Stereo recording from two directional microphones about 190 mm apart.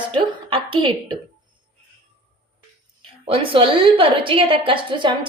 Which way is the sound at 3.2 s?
30° right (ahead or behind).